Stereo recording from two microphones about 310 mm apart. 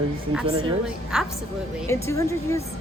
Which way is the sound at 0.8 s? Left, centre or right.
Centre.